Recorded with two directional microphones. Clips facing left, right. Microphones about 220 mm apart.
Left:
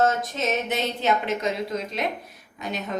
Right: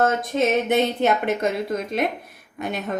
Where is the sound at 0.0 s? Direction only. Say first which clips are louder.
Right 3 dB; 55° right (ahead or behind).